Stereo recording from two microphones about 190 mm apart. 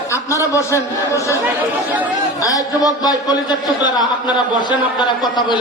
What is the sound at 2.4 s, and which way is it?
A man's voice, 20° left (ahead or behind).